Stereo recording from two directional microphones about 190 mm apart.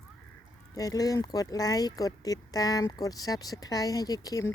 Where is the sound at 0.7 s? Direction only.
20° left (ahead or behind).